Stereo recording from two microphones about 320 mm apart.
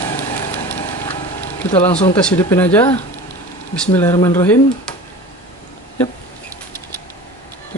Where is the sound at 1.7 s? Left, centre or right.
Centre.